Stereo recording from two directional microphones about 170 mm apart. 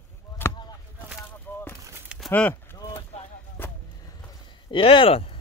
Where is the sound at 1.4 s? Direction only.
10° left (ahead or behind).